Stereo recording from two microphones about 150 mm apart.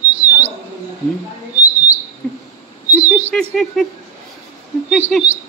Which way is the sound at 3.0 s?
10° right (ahead or behind).